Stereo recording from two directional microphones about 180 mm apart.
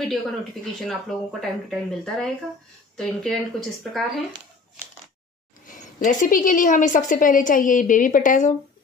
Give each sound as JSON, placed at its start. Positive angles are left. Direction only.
{"t": 0.1, "sound": "speech", "side_deg": 0}
{"t": 5.7, "sound": "a woman's voice", "side_deg": 45}